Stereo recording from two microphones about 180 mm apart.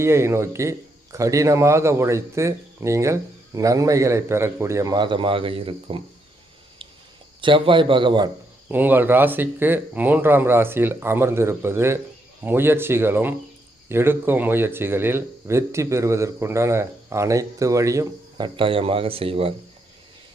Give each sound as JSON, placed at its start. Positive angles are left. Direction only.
{"t": 0.0, "sound": "a man's voice", "side_deg": -15}
{"t": 7.4, "sound": "a man's voice", "side_deg": -30}
{"t": 8.7, "sound": "a man's voice", "side_deg": -10}